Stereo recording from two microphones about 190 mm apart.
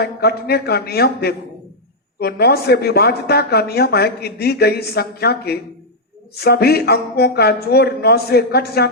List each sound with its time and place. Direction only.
0.0 s speech: 55° left (ahead or behind)